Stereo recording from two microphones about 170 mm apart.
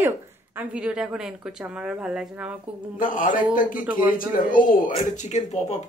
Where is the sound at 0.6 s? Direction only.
5° right (ahead or behind).